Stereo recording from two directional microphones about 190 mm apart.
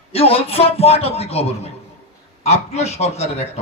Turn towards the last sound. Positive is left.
turn(degrees=35)  # may be behind; listen again after turning